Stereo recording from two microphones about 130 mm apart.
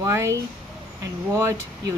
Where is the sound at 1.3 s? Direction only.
20° right (ahead or behind).